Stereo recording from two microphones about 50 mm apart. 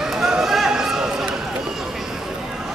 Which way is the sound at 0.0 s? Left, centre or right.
Centre.